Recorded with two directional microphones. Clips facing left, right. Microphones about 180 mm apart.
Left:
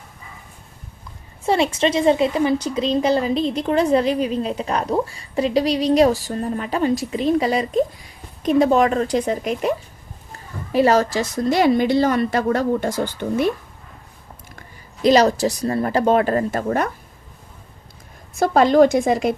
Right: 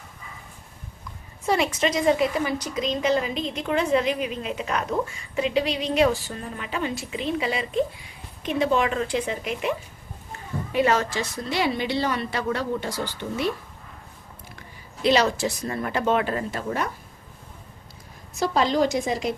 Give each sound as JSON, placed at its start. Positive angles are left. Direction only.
{"t": 1.5, "sound": "a woman's voice", "side_deg": 30}
{"t": 15.0, "sound": "speech", "side_deg": 40}
{"t": 18.3, "sound": "a woman's voice", "side_deg": 55}